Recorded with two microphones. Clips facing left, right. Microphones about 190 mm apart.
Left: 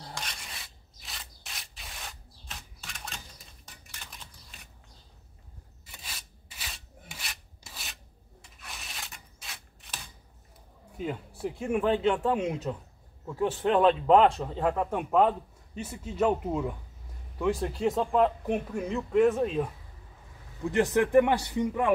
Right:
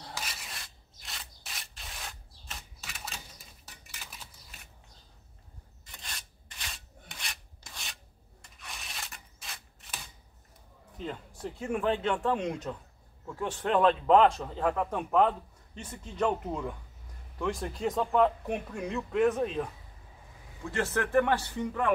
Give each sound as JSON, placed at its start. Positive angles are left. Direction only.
{"t": 0.0, "sound": "rub", "side_deg": -5}
{"t": 3.6, "sound": "dishes", "side_deg": -5}
{"t": 5.9, "sound": "filing", "side_deg": 5}
{"t": 11.0, "sound": "a man's voice", "side_deg": 10}